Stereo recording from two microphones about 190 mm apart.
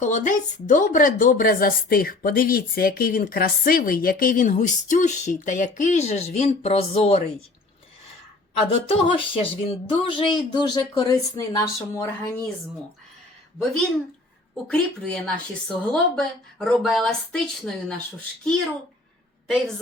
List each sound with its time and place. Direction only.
0.0 s speech: 40° left (ahead or behind)
8.7 s a sound: 30° left (ahead or behind)
10.5 s speech: 20° left (ahead or behind)
14.7 s a woman's voice: 5° left (ahead or behind)
19.5 s a woman's voice: centre (ahead or behind)